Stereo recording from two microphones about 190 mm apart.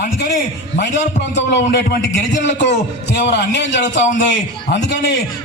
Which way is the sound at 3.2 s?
65° left (ahead or behind).